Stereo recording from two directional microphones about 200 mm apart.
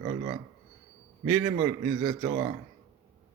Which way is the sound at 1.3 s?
15° right (ahead or behind).